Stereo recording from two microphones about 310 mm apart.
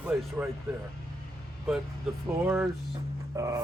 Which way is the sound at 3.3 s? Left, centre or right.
Centre.